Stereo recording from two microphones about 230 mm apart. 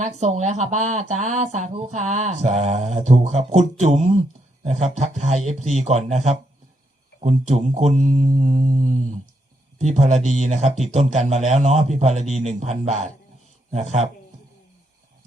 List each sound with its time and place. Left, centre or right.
0.0 s mantra: right
1.2 s a man's voice: right
7.9 s mantra: right
9.8 s a man's voice: right